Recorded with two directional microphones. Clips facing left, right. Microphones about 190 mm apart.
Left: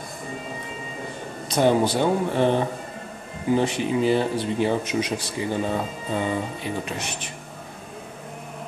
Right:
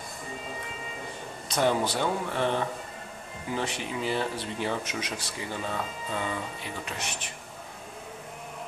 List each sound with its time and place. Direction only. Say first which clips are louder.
1.5 s speech: left 6 dB; 20° left (ahead or behind)